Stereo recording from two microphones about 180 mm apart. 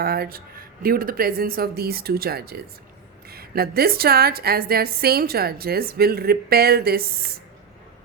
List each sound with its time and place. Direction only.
0.0 s a woman's voice: 60° right (ahead or behind)